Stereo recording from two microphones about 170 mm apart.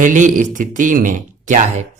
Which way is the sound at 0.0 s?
50° right (ahead or behind).